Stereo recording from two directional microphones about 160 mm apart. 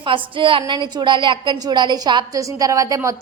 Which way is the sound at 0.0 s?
30° right (ahead or behind).